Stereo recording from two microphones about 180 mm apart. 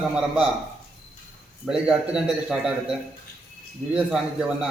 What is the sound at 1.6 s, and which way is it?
A man's voice, 5° right (ahead or behind).